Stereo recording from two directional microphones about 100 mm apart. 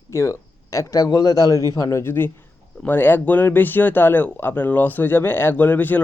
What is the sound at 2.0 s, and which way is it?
Speech, 20° left (ahead or behind).